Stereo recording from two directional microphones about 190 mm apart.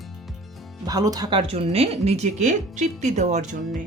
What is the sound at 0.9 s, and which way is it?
Speech, 20° right (ahead or behind).